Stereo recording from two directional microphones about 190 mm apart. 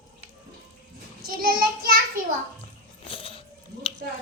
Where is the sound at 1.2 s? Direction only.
50° right (ahead or behind).